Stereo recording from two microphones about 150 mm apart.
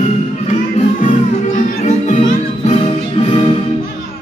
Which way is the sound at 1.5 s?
50° left (ahead or behind).